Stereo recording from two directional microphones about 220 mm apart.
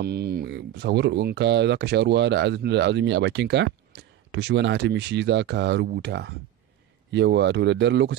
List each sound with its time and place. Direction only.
0.0 s speech: 45° right (ahead or behind)